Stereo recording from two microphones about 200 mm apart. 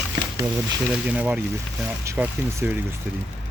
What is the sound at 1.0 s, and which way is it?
Speech, 5° right (ahead or behind).